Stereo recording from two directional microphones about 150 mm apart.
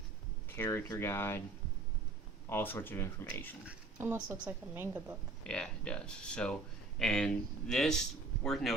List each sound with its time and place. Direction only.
0.5 s speech: 15° left (ahead or behind)
2.5 s speech: 15° left (ahead or behind)
3.7 s a woman's voice: 15° right (ahead or behind)
5.4 s speech: 5° left (ahead or behind)